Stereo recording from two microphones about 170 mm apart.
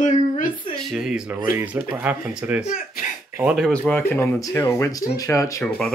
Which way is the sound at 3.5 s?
5° left (ahead or behind).